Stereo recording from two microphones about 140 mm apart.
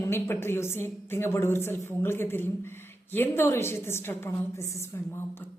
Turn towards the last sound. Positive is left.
turn(degrees=15)  # may be behind; listen again after turning